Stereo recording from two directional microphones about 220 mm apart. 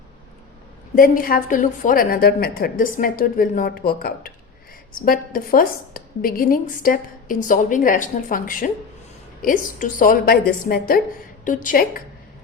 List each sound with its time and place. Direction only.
0.9 s a woman's voice: 40° left (ahead or behind)